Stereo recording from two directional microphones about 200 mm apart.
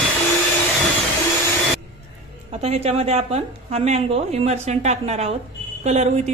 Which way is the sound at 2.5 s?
30° right (ahead or behind).